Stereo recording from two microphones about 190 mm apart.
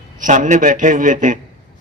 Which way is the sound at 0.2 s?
40° right (ahead or behind).